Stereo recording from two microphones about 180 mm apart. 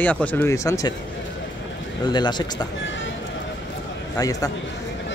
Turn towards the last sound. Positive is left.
turn(degrees=20)  # may be behind; listen again after turning